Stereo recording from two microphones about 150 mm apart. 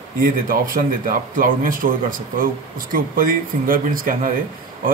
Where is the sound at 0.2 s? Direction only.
70° right (ahead or behind).